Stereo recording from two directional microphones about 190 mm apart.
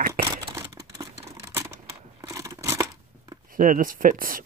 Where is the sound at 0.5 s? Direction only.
15° right (ahead or behind).